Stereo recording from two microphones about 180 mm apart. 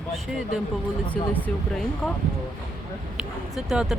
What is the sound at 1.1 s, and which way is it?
Speech, 10° left (ahead or behind).